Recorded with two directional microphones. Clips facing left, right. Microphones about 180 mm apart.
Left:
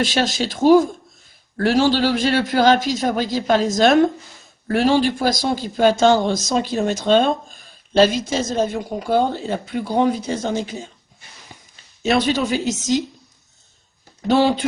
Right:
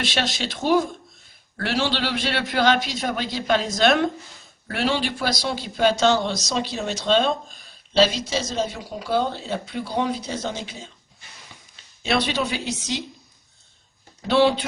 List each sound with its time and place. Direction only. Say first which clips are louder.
0.0 s speech: left 6 dB; 45° left (ahead or behind)
12.0 s speech: left 5 dB; 45° left (ahead or behind)
14.3 s speech: left 2 dB; 45° left (ahead or behind)